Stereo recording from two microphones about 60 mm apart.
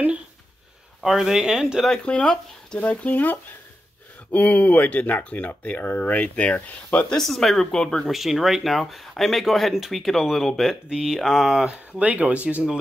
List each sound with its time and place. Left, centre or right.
1.0 s speech: centre
1.9 s speech: centre
7.1 s speech: centre
8.1 s speech: centre
11.7 s speech: right